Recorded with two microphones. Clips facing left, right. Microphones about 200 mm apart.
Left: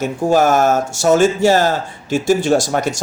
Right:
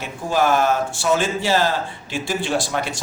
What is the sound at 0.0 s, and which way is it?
Speech, 45° left (ahead or behind).